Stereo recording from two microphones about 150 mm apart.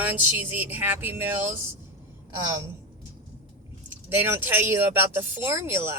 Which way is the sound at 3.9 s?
15° right (ahead or behind).